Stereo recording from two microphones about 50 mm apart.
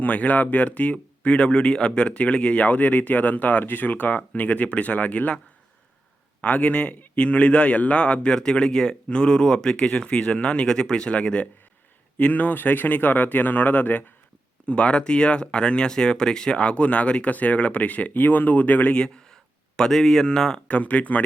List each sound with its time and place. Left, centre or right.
0.0 s a man's voice: left
6.4 s a man's voice: left
18.9 s speech: centre
20.7 s a man's voice: left